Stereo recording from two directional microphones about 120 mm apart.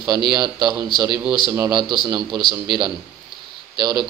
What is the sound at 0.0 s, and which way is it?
A man's voice, 40° right (ahead or behind).